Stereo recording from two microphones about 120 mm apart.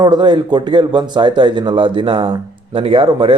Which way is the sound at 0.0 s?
40° right (ahead or behind).